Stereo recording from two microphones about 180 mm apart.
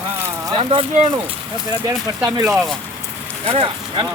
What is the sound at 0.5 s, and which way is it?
Speech, 30° right (ahead or behind).